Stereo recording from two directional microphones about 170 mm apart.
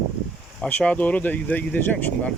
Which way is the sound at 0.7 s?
10° left (ahead or behind).